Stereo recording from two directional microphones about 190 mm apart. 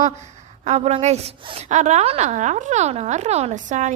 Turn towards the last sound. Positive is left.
turn(degrees=-40)  # may be behind; listen again after turning